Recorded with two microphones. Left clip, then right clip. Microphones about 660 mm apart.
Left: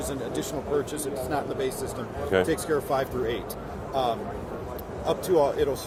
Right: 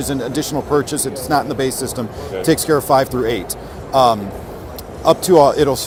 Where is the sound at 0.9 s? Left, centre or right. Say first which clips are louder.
Right 10 dB; right.